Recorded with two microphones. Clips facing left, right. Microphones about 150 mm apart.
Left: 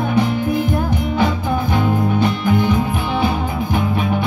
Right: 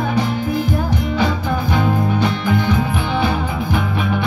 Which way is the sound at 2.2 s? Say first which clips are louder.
Left 2 dB; 50° left (ahead or behind).